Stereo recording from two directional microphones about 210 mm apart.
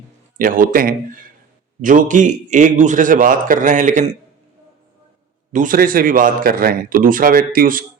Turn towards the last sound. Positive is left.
turn(degrees=-40)  # may be behind; listen again after turning